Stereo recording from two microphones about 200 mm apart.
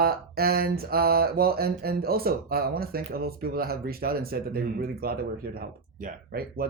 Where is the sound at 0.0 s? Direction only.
50° right (ahead or behind).